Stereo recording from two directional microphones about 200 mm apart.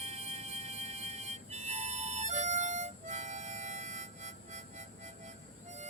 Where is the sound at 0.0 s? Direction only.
30° right (ahead or behind).